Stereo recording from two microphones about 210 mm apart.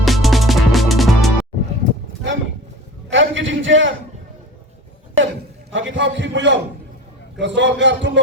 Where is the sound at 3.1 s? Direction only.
60° right (ahead or behind).